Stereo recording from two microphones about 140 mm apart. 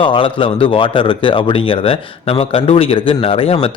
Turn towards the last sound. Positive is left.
turn(degrees=45)  # may be behind; listen again after turning